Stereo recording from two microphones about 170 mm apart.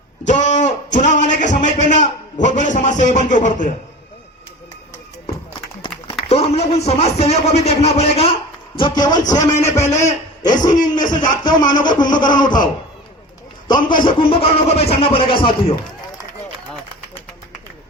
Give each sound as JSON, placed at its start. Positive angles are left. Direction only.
{"t": 0.3, "sound": "guitar", "side_deg": 45}
{"t": 0.9, "sound": "a man's voice", "side_deg": 45}
{"t": 6.2, "sound": "a man's voice", "side_deg": 35}
{"t": 13.7, "sound": "a man's voice", "side_deg": 25}